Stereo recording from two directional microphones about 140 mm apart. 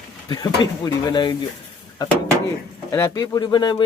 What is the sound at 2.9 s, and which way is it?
Speech, 20° left (ahead or behind).